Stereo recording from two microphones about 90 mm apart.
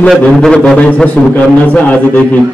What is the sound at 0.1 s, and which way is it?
A man's voice, 5° left (ahead or behind).